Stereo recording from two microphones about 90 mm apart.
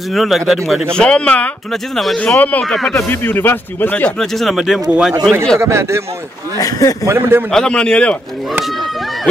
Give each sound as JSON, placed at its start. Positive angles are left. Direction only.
{"t": 0.1, "sound": "speech", "side_deg": 0}
{"t": 0.9, "sound": "a man's voice", "side_deg": 10}
{"t": 1.7, "sound": "speech", "side_deg": 0}
{"t": 2.1, "sound": "a man's voice", "side_deg": 15}
{"t": 2.6, "sound": "speech", "side_deg": 5}
{"t": 3.0, "sound": "speech", "side_deg": 25}
{"t": 4.2, "sound": "speech", "side_deg": 5}
{"t": 5.6, "sound": "a man's voice", "side_deg": -30}
{"t": 6.6, "sound": "a man's voice", "side_deg": 40}
{"t": 7.1, "sound": "a man's voice", "side_deg": -25}
{"t": 7.5, "sound": "a man's voice", "side_deg": 10}